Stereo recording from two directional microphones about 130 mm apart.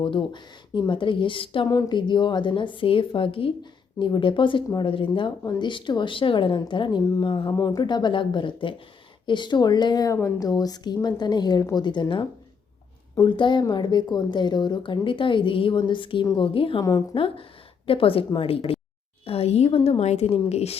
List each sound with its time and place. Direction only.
0.0 s a woman's voice: 40° left (ahead or behind)